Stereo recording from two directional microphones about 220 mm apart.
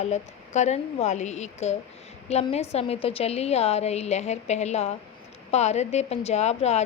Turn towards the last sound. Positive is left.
turn(degrees=30)  # may be behind; listen again after turning